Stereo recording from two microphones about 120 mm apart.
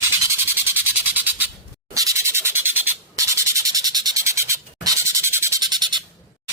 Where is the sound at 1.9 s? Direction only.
25° right (ahead or behind).